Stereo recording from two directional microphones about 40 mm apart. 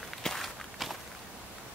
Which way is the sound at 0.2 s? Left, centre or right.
Centre.